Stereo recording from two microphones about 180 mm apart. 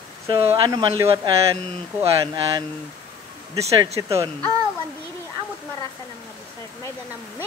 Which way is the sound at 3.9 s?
15° right (ahead or behind).